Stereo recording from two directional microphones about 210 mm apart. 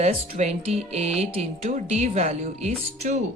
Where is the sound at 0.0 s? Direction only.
30° right (ahead or behind).